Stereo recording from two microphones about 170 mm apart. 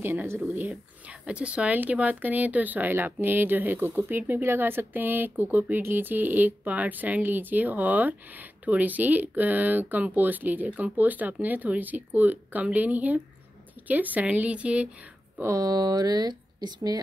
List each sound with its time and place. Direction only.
0.0 s speech: 15° right (ahead or behind)
15.3 s speech: 15° right (ahead or behind)